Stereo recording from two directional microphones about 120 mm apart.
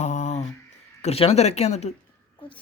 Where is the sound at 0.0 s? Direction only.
85° left.